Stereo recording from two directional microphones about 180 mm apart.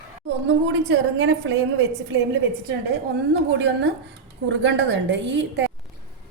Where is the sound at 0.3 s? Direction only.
70° right (ahead or behind).